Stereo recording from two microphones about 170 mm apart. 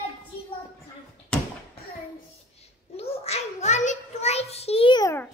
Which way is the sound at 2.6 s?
35° left (ahead or behind).